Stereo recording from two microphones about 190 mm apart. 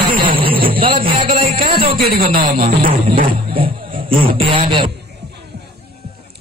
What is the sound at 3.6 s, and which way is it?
A man's voice, 30° right (ahead or behind).